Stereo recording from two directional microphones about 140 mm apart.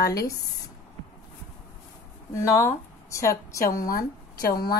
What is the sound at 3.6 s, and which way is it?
A woman's voice, 85° left.